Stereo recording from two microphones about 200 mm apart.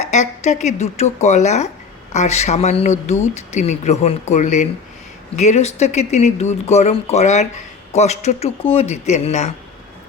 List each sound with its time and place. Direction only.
0.0 s speech: 35° left (ahead or behind)